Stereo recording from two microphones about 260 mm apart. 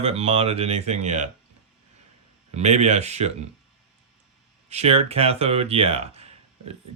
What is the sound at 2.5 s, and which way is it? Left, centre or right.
Speech, right.